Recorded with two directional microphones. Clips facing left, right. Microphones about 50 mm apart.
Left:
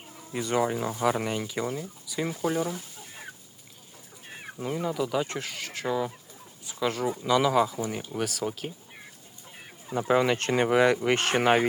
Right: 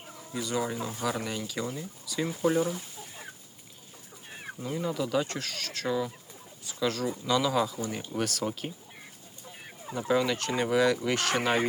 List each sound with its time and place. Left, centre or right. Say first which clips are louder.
0.3 s fowl: left 5 dB; left
1.2 s speech: left 4 dB; left
1.8 s speech: left 1 dB; centre
4.3 s chicken: even; centre
4.6 s speech: left 3 dB; centre
4.9 s speech: even; centre
5.3 s speech: left 1 dB; centre
9.9 s fowl: left 3 dB; left